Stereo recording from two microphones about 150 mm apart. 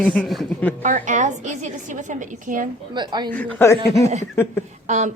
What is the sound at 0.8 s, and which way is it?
A woman's voice, 60° right (ahead or behind).